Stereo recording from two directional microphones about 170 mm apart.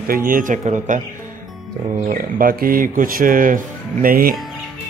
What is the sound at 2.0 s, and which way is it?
Speech, 55° right (ahead or behind).